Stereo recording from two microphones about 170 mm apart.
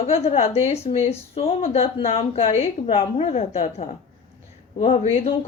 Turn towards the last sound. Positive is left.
turn(degrees=35)  # may be behind; listen again after turning